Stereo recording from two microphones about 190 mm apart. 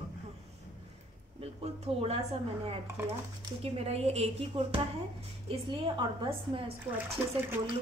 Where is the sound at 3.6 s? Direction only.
35° right (ahead or behind).